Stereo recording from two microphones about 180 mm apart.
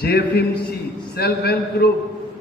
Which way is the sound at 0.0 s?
60° left (ahead or behind).